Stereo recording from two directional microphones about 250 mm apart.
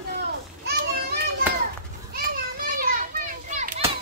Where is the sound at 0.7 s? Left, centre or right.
Right.